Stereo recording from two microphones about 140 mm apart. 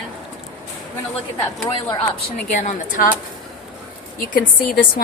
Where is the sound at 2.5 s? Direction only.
65° left (ahead or behind).